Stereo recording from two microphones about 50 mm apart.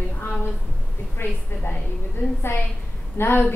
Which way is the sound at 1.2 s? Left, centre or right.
Left.